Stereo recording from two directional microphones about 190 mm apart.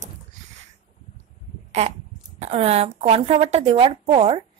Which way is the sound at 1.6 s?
35° right (ahead or behind).